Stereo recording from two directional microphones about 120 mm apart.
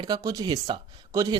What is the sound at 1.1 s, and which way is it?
Speech, 30° right (ahead or behind).